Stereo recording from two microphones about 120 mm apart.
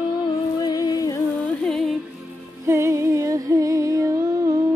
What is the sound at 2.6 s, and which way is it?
Music, 25° right (ahead or behind).